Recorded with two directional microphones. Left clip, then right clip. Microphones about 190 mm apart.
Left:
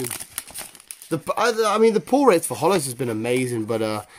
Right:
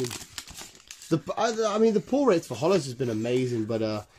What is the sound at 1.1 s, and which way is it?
Speech, 40° left (ahead or behind).